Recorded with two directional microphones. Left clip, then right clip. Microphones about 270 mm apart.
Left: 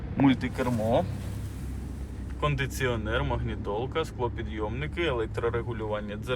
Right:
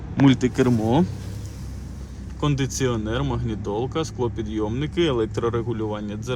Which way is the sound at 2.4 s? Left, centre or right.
Right.